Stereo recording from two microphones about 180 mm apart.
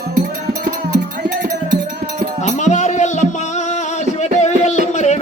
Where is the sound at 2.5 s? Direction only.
40° left (ahead or behind).